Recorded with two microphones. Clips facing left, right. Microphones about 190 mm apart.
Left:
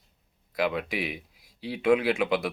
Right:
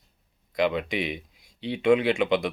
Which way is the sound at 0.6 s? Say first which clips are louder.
Right 3 dB; 5° left (ahead or behind).